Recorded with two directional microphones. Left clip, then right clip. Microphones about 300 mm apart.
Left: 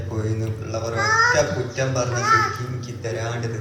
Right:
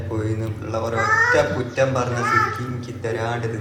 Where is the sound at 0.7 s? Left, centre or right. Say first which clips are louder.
Right 1 dB; centre.